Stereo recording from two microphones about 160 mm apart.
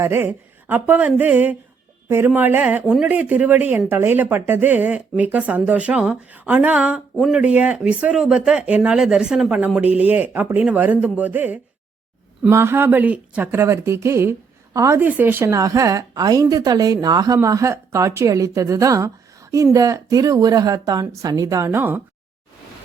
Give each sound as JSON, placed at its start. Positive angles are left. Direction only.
{"t": 0.0, "sound": "a woman's voice", "side_deg": -15}